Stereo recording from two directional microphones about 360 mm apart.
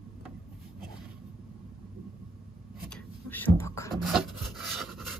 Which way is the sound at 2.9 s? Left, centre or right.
Centre.